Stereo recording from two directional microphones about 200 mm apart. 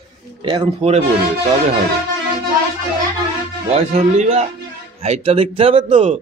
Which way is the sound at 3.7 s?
35° right (ahead or behind).